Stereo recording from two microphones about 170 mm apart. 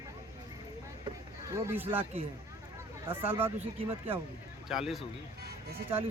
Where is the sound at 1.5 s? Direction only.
15° right (ahead or behind).